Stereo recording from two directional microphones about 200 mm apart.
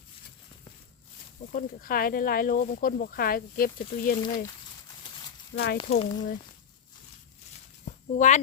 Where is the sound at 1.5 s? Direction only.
45° left (ahead or behind).